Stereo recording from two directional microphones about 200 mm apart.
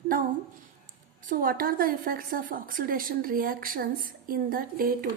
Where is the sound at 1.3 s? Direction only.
45° right (ahead or behind).